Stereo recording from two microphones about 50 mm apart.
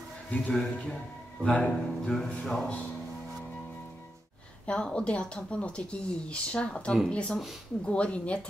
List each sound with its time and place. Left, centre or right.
0.5 s speech: centre
4.6 s speech: centre